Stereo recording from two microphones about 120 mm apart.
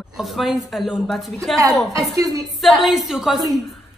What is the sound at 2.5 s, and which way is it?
Speech, centre (ahead or behind).